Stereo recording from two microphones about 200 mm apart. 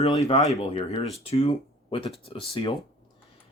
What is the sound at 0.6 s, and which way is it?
Speech, 30° left (ahead or behind).